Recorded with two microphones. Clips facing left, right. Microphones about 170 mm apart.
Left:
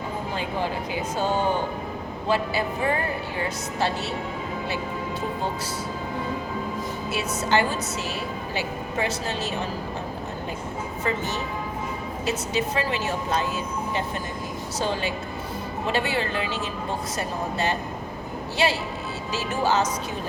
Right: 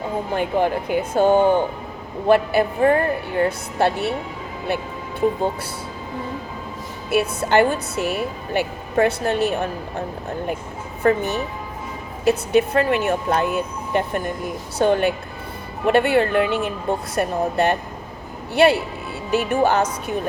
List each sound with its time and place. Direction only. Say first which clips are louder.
0.3 s a woman's voice: right 9 dB; 55° right (ahead or behind)
7.1 s a woman's voice: right 6 dB; 55° right (ahead or behind)
11.0 s a woman's voice: right 10 dB; 55° right (ahead or behind)
12.2 s a woman's voice: right 10 dB; 60° right (ahead or behind)